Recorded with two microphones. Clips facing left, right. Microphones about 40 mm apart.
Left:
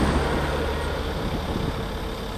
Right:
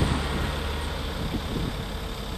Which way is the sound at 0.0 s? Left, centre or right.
Centre.